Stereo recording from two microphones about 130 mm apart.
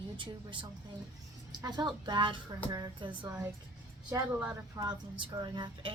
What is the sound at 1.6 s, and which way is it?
A woman's voice, 35° right (ahead or behind).